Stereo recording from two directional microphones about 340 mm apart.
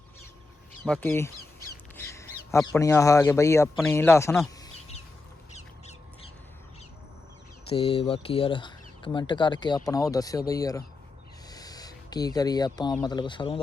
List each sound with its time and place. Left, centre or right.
0.9 s speech: centre
5.5 s crow: centre
7.7 s speech: centre